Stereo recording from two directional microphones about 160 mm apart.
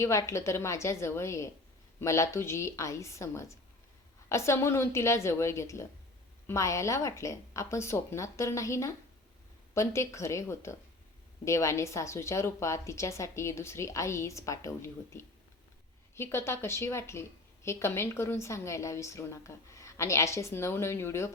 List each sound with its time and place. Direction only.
0.0 s a woman's voice: 20° left (ahead or behind)